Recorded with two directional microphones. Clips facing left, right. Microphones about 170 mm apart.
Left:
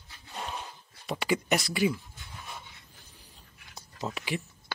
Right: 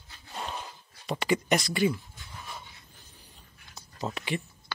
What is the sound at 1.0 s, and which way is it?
Speech, 5° left (ahead or behind).